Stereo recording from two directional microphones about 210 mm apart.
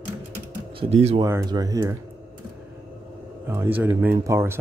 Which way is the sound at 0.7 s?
30° right (ahead or behind).